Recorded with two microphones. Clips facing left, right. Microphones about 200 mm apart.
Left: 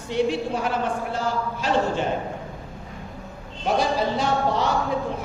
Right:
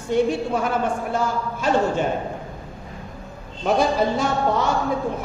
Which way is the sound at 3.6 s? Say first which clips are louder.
Right 3 dB; 45° right (ahead or behind).